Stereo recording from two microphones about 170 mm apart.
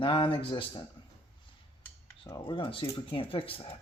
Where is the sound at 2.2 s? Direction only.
30° left (ahead or behind).